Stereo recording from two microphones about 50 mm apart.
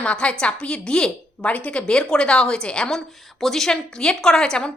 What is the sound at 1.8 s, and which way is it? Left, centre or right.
A woman's voice, centre.